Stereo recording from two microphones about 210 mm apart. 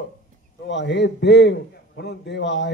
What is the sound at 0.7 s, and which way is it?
Speech, 55° left (ahead or behind).